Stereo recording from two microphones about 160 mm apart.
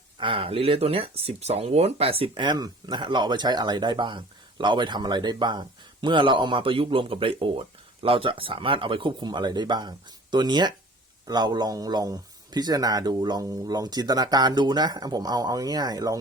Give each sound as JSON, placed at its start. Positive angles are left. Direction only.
{"t": 0.2, "sound": "a man's voice", "side_deg": -35}